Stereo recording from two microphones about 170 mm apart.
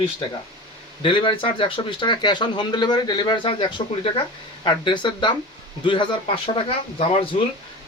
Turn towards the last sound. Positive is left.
turn(degrees=35)  # may be behind; listen again after turning